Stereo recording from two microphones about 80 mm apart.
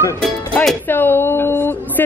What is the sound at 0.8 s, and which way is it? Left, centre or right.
Speech, left.